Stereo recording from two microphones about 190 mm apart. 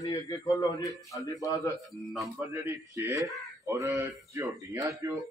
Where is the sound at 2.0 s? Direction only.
Centre (ahead or behind).